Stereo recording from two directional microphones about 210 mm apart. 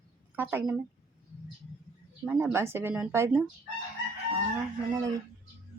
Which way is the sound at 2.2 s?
10° right (ahead or behind).